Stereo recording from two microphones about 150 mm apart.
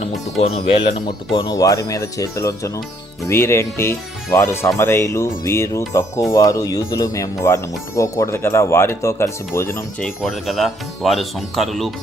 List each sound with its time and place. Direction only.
0.4 s speech: 40° left (ahead or behind)
1.5 s speech: 20° left (ahead or behind)
10.0 s speech: centre (ahead or behind)